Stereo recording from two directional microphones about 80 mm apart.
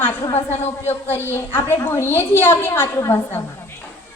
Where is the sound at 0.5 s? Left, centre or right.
Left.